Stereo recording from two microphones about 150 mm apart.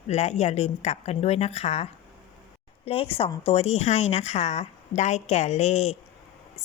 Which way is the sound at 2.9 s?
40° left (ahead or behind).